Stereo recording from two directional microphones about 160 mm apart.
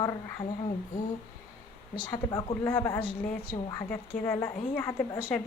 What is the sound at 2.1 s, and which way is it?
A woman's voice, 25° left (ahead or behind).